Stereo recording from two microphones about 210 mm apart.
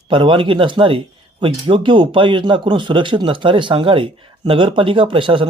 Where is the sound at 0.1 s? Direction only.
25° right (ahead or behind).